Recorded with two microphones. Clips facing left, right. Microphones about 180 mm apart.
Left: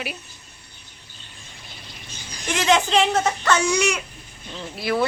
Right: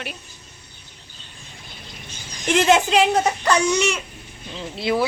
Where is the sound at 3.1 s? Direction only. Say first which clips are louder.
Right 1 dB; 15° right (ahead or behind).